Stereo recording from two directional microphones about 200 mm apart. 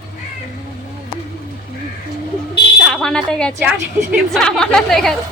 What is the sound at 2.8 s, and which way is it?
Speech, centre (ahead or behind).